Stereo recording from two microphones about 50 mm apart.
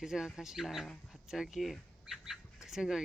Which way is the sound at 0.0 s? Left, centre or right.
Centre.